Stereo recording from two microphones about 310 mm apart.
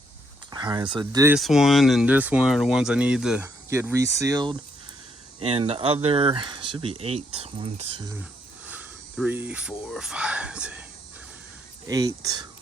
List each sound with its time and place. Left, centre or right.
0.5 s speech: centre
8.2 s speech: centre
11.9 s speech: centre